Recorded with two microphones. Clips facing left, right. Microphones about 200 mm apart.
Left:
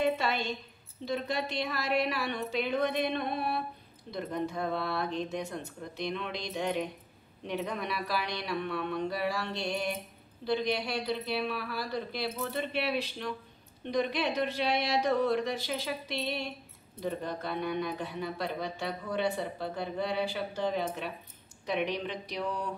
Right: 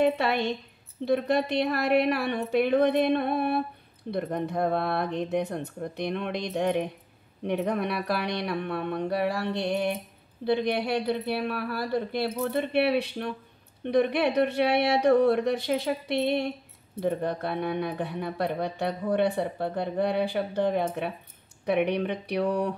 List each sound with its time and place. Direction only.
0.0 s speech: 60° right (ahead or behind)